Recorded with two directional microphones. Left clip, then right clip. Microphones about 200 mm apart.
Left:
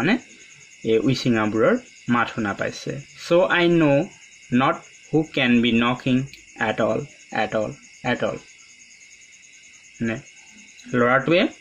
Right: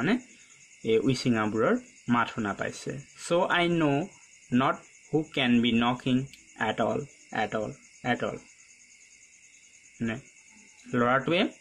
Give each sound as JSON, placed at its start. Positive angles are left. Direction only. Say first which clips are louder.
{"t": 0.8, "sound": "speech", "louder": "left 5 dB", "side_deg": -20}
{"t": 9.9, "sound": "speech", "louder": "left 7 dB", "side_deg": -15}